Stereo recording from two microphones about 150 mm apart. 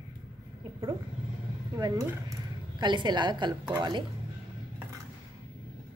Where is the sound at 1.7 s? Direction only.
25° right (ahead or behind).